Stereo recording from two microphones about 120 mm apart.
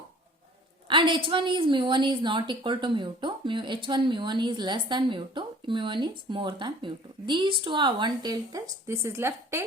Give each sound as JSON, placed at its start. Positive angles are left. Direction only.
{"t": 0.9, "sound": "a woman's voice", "side_deg": -40}